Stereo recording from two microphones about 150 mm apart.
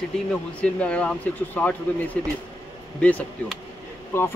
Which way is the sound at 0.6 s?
10° left (ahead or behind).